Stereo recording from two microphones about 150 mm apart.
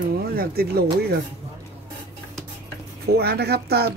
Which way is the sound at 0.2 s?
90° right.